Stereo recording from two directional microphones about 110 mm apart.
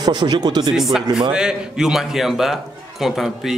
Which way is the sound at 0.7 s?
5° right (ahead or behind).